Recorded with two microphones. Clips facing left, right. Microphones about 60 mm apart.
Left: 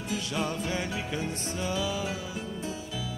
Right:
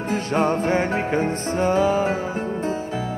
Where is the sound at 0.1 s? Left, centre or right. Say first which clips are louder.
Right 11 dB; right.